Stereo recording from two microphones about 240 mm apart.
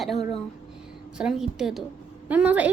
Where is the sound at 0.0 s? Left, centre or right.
Centre.